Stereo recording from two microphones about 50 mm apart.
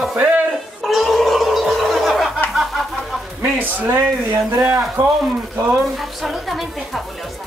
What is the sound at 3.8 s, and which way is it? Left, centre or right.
Speech, right.